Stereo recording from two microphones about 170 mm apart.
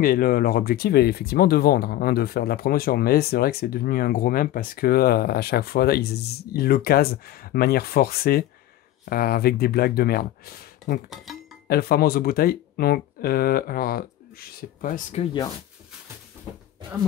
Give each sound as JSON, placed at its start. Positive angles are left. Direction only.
{"t": 0.0, "sound": "speech", "side_deg": 60}